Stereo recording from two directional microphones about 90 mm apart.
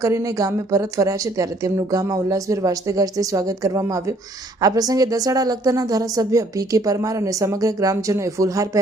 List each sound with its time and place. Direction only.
0.0 s speech: 40° right (ahead or behind)